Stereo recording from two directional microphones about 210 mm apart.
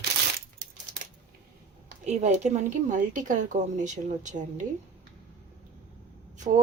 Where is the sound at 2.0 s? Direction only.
35° right (ahead or behind).